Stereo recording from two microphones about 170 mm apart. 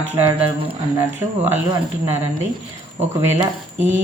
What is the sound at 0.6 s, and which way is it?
Speech, 15° right (ahead or behind).